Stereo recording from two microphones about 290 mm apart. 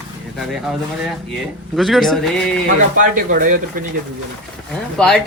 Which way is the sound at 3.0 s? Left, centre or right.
Right.